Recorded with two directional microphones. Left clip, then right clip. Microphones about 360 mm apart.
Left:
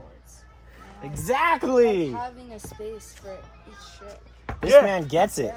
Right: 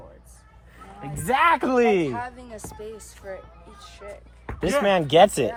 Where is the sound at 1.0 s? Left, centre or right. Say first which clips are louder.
Right 2 dB; centre.